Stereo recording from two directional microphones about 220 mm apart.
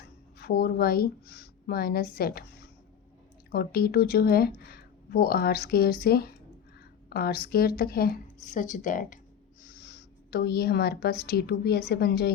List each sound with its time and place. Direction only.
0.3 s speech: 45° left (ahead or behind)
3.5 s speech: 45° left (ahead or behind)